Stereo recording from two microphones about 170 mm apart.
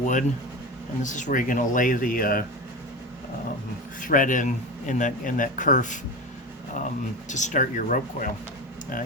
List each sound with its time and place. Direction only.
0.0 s speech: 45° left (ahead or behind)
4.0 s speech: 50° left (ahead or behind)
7.3 s speech: 45° left (ahead or behind)